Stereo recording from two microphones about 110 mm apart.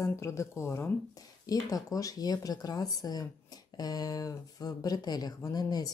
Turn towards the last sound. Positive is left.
turn(degrees=35)  # may be behind; listen again after turning